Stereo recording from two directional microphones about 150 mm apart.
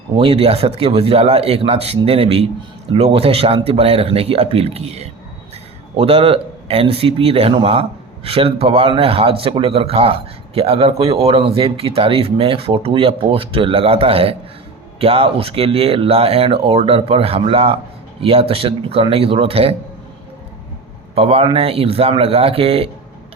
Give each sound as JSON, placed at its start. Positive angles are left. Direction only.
{"t": 0.1, "sound": "speech", "side_deg": -35}
{"t": 21.2, "sound": "speech", "side_deg": -40}